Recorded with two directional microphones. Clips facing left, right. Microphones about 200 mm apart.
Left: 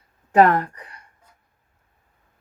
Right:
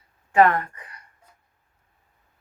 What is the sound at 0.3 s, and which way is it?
Speech, 40° left (ahead or behind).